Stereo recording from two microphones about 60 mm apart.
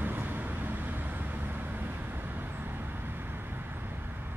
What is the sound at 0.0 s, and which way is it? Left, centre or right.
Vehicle, right.